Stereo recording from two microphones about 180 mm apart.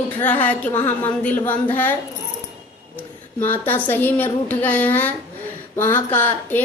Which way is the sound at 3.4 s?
10° left (ahead or behind).